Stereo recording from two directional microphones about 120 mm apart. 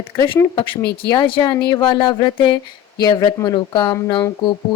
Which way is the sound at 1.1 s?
45° left (ahead or behind).